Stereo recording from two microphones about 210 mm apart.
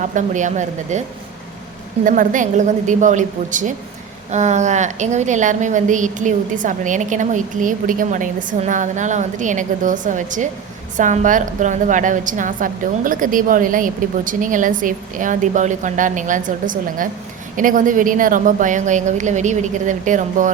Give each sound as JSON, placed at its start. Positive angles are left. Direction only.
{"t": 0.1, "sound": "a woman's voice", "side_deg": -35}
{"t": 2.0, "sound": "a woman's voice", "side_deg": -40}